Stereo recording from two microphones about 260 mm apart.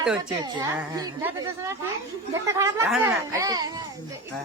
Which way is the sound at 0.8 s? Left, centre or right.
Centre.